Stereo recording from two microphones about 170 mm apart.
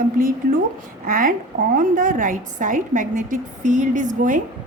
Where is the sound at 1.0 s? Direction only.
55° right (ahead or behind).